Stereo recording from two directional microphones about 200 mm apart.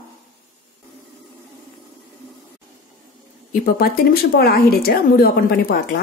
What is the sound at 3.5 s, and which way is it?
Speech, 45° left (ahead or behind).